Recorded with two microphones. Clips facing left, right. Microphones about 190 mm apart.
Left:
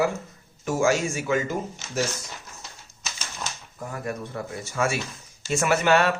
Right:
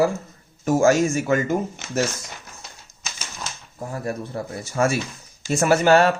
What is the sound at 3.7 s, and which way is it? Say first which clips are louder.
Speech: right 4 dB; 30° right (ahead or behind).